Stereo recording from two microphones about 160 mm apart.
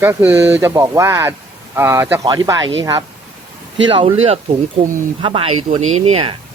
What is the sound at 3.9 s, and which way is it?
Speech, 35° right (ahead or behind).